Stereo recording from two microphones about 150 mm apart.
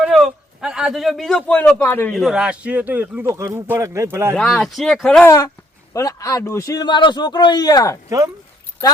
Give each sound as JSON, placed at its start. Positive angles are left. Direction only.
{"t": 0.0, "sound": "a man's voice", "side_deg": -5}
{"t": 2.1, "sound": "speech", "side_deg": -5}
{"t": 4.4, "sound": "speech", "side_deg": 5}
{"t": 5.2, "sound": "a man's voice", "side_deg": 20}